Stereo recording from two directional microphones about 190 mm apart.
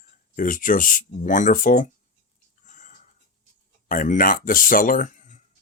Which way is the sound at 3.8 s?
45° left (ahead or behind).